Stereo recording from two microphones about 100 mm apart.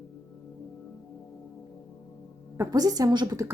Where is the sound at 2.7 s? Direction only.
40° right (ahead or behind).